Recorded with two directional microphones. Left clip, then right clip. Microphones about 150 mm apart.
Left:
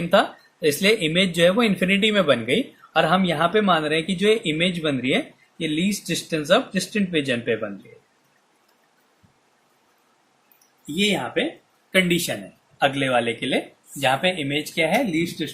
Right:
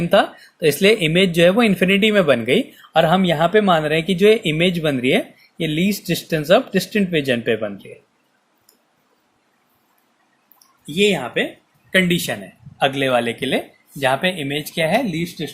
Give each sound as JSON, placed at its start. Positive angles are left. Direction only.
{"t": 0.1, "sound": "speech", "side_deg": -45}
{"t": 10.9, "sound": "speech", "side_deg": -55}